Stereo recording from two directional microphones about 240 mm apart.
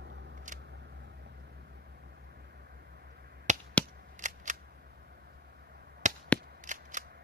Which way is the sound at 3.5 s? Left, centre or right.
Right.